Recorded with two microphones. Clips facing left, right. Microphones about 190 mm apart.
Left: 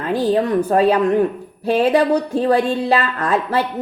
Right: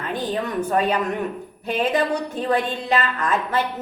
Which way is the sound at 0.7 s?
35° left (ahead or behind).